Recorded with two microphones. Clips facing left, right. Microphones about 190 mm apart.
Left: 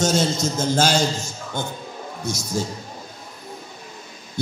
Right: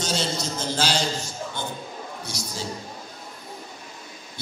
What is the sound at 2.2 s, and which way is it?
Speech, 45° left (ahead or behind).